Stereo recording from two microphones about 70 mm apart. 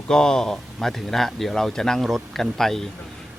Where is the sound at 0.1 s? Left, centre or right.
Centre.